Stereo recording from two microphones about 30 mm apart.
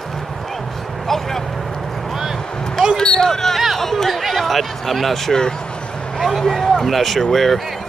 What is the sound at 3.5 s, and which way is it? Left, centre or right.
Chatter, centre.